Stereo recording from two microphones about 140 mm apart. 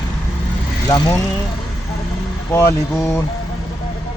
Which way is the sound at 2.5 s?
15° left (ahead or behind).